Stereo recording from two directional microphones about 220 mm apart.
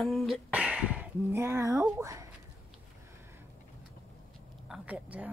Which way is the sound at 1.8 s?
15° right (ahead or behind).